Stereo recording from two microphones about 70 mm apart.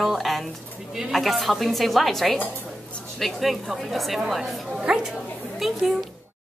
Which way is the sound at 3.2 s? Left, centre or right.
Centre.